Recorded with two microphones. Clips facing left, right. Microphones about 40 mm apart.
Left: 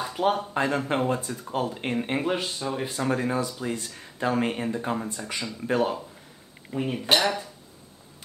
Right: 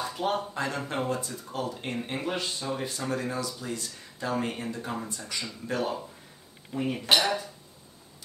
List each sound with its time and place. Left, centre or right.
0.2 s speech: left